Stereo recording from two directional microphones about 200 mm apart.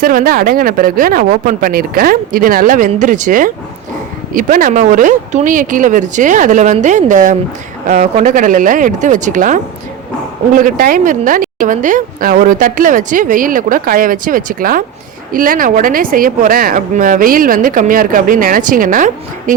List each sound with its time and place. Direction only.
0.0 s a woman's voice: 45° right (ahead or behind)
10.6 s a woman's voice: 45° right (ahead or behind)